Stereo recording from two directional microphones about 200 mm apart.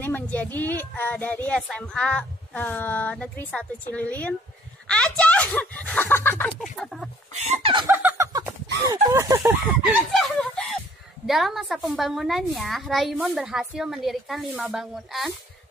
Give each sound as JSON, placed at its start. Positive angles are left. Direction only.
{"t": 0.0, "sound": "speech", "side_deg": 10}
{"t": 4.8, "sound": "a sound", "side_deg": 5}
{"t": 6.6, "sound": "a woman's voice", "side_deg": 0}
{"t": 7.3, "sound": "speech", "side_deg": -35}
{"t": 7.7, "sound": "a sound", "side_deg": -10}
{"t": 8.8, "sound": "speech", "side_deg": -15}
{"t": 9.4, "sound": "a woman's voice", "side_deg": 0}